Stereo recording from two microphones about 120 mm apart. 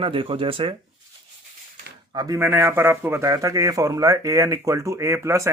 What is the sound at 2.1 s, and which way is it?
Speech, 35° right (ahead or behind).